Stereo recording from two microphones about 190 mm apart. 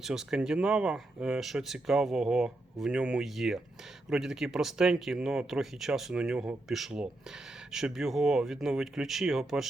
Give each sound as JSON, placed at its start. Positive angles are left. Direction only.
{"t": 0.0, "sound": "speech", "side_deg": -5}